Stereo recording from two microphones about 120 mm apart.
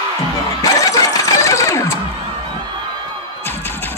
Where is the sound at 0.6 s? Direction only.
30° left (ahead or behind).